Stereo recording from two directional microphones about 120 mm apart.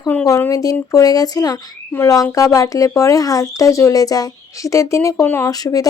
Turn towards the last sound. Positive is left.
turn(degrees=30)  # may be behind; listen again after turning